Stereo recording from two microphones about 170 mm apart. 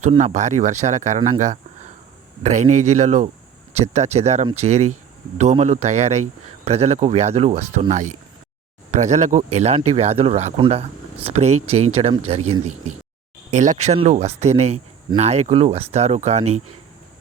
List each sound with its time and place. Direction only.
0.0 s speech: 35° right (ahead or behind)
13.5 s speech: 45° right (ahead or behind)